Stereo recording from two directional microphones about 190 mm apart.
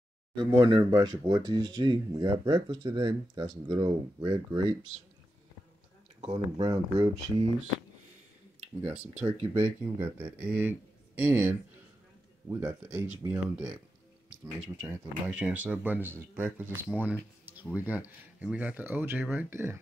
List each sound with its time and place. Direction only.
0.5 s speech: 20° right (ahead or behind)
6.2 s speech: 25° right (ahead or behind)
9.2 s speech: 25° right (ahead or behind)
10.5 s speech: 10° right (ahead or behind)
12.5 s speech: 10° right (ahead or behind)